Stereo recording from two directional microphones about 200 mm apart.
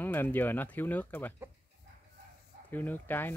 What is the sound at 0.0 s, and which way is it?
Speech, 10° left (ahead or behind).